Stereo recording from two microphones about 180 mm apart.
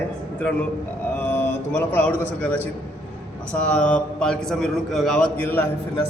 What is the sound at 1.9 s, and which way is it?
Speech, 10° left (ahead or behind).